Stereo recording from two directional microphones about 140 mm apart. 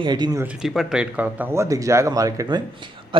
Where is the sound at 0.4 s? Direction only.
5° right (ahead or behind).